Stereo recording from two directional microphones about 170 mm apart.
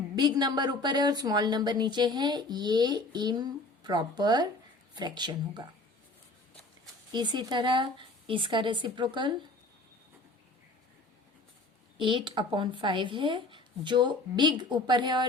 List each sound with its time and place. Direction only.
0.2 s speech: 25° right (ahead or behind)
7.1 s speech: 25° right (ahead or behind)
11.9 s speech: 30° right (ahead or behind)